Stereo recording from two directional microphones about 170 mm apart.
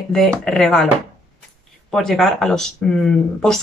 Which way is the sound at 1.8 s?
Centre (ahead or behind).